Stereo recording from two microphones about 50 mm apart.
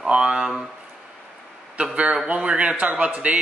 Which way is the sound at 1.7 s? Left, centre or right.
Right.